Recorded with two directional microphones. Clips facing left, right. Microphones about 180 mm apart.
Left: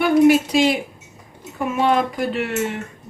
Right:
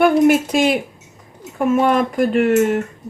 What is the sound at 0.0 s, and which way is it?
Speech, 50° right (ahead or behind).